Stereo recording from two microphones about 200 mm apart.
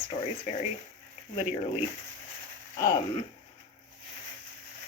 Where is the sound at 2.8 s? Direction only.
15° left (ahead or behind).